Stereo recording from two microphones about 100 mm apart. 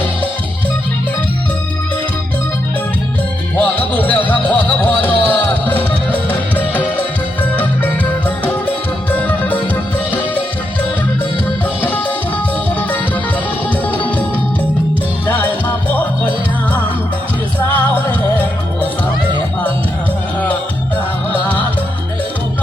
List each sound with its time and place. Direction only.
3.6 s music: 15° left (ahead or behind)
8.4 s music: 20° left (ahead or behind)
11.8 s music: 15° left (ahead or behind)
13.9 s music: 15° left (ahead or behind)
15.3 s music: 20° left (ahead or behind)
17.7 s music: 15° left (ahead or behind)